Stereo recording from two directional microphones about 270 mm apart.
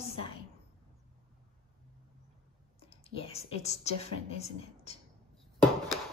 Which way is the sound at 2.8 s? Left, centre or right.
Left.